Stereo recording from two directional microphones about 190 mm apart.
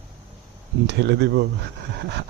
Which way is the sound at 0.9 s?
65° right (ahead or behind).